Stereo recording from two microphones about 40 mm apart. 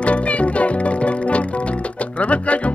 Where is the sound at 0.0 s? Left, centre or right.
Left.